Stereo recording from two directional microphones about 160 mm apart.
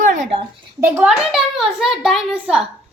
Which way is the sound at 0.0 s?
50° right (ahead or behind).